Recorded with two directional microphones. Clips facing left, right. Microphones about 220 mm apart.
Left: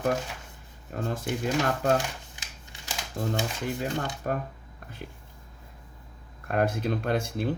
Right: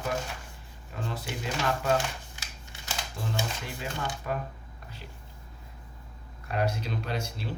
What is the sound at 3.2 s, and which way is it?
Speech, 40° left (ahead or behind).